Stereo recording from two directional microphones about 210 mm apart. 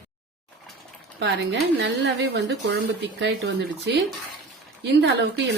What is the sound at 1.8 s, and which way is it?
Speech, 55° right (ahead or behind).